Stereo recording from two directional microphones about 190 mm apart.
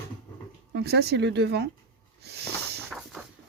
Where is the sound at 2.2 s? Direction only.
60° right (ahead or behind).